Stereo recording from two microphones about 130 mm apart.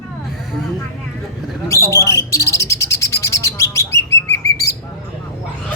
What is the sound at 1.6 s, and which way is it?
Bird, 20° left (ahead or behind).